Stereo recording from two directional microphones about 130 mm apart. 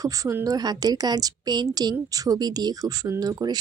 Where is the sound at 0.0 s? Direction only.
25° right (ahead or behind).